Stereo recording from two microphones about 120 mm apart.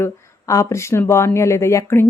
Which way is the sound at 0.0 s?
25° left (ahead or behind).